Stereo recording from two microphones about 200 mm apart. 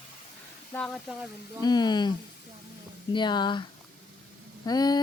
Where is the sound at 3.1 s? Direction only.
20° left (ahead or behind).